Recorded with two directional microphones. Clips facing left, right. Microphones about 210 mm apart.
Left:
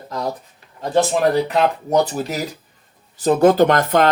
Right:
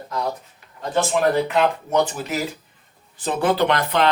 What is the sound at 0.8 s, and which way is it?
Speech, 35° left (ahead or behind).